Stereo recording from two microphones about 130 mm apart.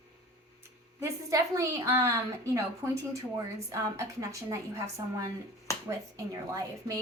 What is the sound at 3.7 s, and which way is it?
A woman's voice, 25° right (ahead or behind).